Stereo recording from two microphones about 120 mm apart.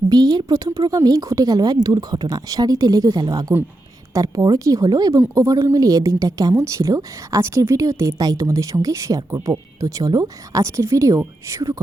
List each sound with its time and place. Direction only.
0.1 s a woman's voice: 35° right (ahead or behind)